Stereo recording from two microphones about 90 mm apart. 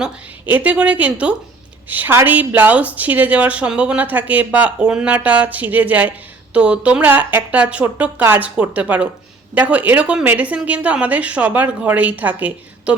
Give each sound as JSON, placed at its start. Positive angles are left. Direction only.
{"t": 0.4, "sound": "a woman's voice", "side_deg": -20}